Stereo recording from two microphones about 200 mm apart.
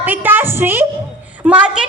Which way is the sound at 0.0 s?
10° right (ahead or behind).